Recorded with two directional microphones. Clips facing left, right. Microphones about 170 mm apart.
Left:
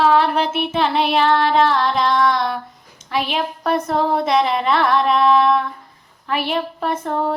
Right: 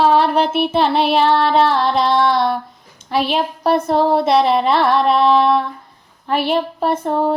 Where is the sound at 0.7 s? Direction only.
35° right (ahead or behind).